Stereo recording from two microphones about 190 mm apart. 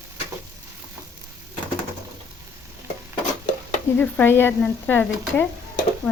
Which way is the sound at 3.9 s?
10° left (ahead or behind).